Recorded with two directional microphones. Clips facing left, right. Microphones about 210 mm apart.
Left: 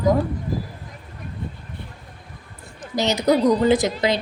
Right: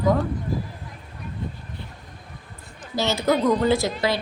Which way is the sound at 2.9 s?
15° left (ahead or behind).